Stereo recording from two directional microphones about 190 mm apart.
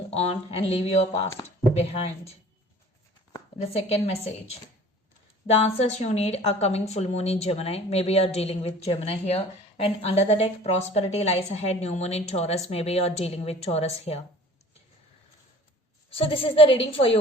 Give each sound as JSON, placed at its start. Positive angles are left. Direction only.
{"t": 0.1, "sound": "a woman's voice", "side_deg": 35}
{"t": 3.6, "sound": "a woman's voice", "side_deg": 35}
{"t": 5.5, "sound": "a woman's voice", "side_deg": 35}
{"t": 16.0, "sound": "a woman's voice", "side_deg": 30}